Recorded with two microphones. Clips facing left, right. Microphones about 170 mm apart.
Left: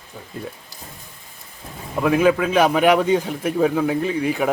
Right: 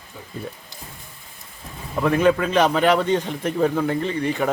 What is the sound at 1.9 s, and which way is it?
Speech, 5° left (ahead or behind).